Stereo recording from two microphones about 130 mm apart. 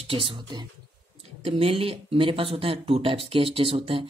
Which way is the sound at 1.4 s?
50° right (ahead or behind).